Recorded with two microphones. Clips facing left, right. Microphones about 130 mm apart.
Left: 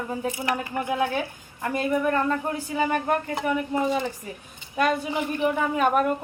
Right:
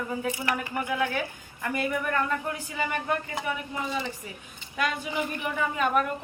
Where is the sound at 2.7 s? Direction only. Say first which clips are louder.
Left 6 dB; 45° left (ahead or behind).